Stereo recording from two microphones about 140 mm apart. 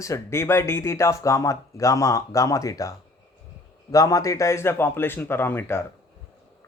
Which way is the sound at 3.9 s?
25° left (ahead or behind).